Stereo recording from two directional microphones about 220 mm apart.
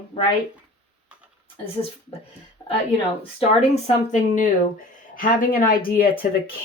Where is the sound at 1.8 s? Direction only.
20° left (ahead or behind).